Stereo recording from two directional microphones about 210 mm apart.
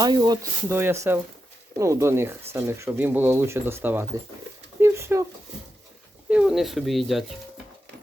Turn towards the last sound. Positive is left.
turn(degrees=0)  # may be behind; listen again after turning